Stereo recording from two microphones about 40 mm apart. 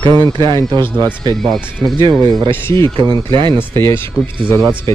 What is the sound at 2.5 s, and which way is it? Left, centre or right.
Speech, left.